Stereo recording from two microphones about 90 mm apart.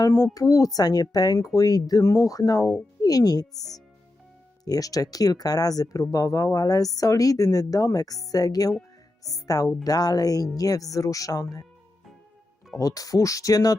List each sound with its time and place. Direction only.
0.1 s speech: 35° left (ahead or behind)
4.6 s speech: 40° left (ahead or behind)
12.8 s speech: 40° left (ahead or behind)